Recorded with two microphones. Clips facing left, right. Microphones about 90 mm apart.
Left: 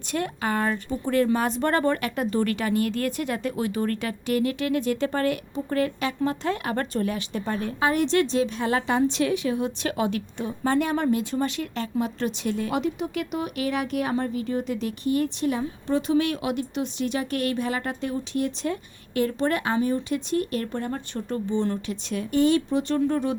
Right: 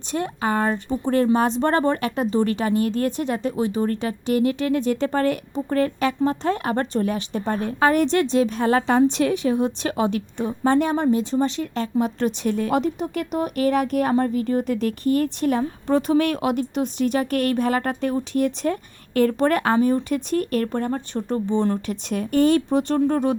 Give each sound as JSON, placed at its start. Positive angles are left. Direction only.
{"t": 0.1, "sound": "a woman's voice", "side_deg": -30}